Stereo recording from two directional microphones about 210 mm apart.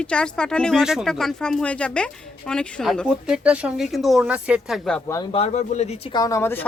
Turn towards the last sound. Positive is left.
turn(degrees=10)  # may be behind; listen again after turning